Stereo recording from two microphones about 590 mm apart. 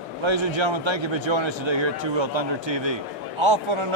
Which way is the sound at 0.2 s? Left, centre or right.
Right.